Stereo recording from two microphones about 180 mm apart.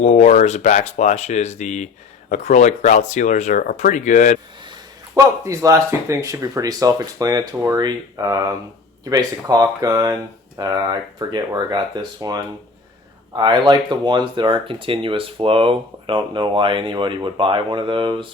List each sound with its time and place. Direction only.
0.0 s speech: 40° left (ahead or behind)
5.1 s speech: 20° right (ahead or behind)